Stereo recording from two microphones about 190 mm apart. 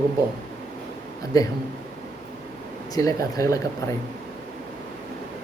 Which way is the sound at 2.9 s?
20° left (ahead or behind).